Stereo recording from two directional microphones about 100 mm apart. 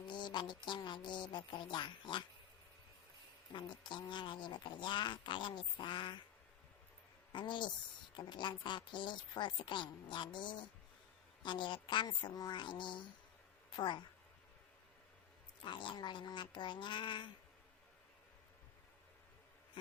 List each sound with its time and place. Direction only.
0.1 s speech: 50° left (ahead or behind)
3.5 s speech: 50° left (ahead or behind)
7.3 s speech: 50° left (ahead or behind)
15.6 s speech: 55° left (ahead or behind)